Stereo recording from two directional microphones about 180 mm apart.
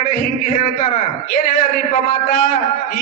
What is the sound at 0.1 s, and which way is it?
A man's voice, 50° left (ahead or behind).